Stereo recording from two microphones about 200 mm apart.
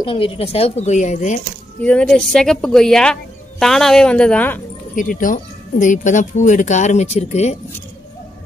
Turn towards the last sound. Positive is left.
turn(degrees=35)  # may be behind; listen again after turning